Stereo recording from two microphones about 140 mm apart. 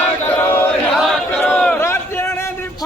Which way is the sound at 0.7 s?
5° left (ahead or behind).